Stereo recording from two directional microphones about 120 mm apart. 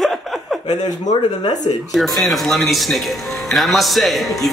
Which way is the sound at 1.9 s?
Centre (ahead or behind).